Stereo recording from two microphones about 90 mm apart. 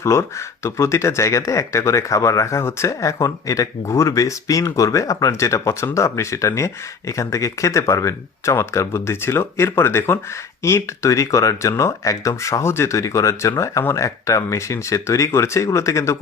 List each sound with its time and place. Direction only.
0.0 s speech: 30° left (ahead or behind)